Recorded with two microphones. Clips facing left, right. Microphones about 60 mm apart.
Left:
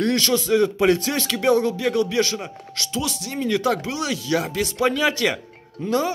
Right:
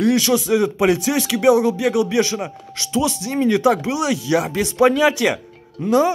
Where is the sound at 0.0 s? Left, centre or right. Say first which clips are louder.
Right 4 dB; centre.